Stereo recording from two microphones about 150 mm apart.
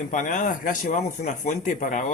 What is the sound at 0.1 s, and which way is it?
Speech, 60° left (ahead or behind).